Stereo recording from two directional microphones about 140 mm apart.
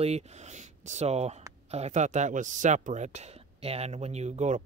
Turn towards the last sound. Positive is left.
turn(degrees=-55)  # may be behind; listen again after turning